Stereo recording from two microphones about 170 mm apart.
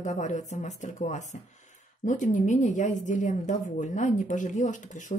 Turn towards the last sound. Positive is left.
turn(degrees=45)  # may be behind; listen again after turning